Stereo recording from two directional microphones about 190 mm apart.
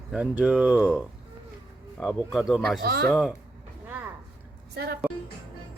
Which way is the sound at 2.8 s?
55° right (ahead or behind).